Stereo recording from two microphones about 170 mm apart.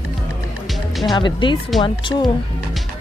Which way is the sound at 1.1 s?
25° left (ahead or behind).